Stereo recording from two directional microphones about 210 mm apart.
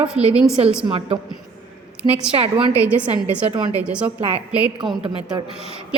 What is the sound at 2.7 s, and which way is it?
A woman's voice, 5° right (ahead or behind).